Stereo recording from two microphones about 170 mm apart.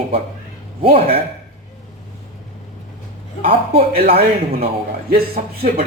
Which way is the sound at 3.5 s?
35° right (ahead or behind).